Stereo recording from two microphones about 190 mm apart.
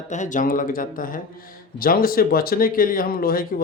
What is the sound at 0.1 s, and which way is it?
Speech, 40° left (ahead or behind).